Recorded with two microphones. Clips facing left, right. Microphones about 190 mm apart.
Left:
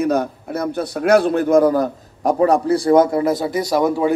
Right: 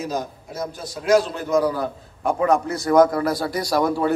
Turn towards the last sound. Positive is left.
turn(degrees=15)  # may be behind; listen again after turning